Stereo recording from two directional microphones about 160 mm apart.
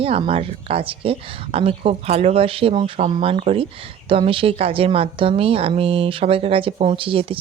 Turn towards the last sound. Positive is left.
turn(degrees=-35)  # may be behind; listen again after turning